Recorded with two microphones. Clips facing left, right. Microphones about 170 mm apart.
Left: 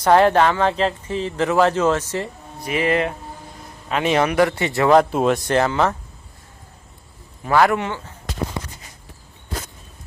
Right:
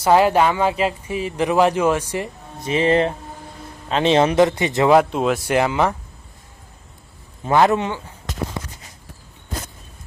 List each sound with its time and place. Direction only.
0.0 s a man's voice: 5° right (ahead or behind)
5.1 s speech: centre (ahead or behind)
5.5 s speech: 15° right (ahead or behind)
7.4 s a man's voice: 20° right (ahead or behind)